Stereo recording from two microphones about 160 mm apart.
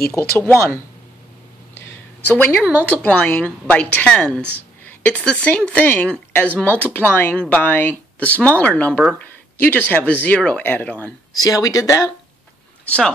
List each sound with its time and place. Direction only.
0.1 s a woman's voice: 10° left (ahead or behind)
1.8 s a sound: 15° left (ahead or behind)
2.8 s a woman's voice: 10° left (ahead or behind)
11.4 s speech: 20° left (ahead or behind)
12.8 s speech: 10° left (ahead or behind)